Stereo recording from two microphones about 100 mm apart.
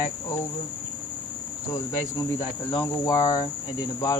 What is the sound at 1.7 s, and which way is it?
Cricket, 35° left (ahead or behind).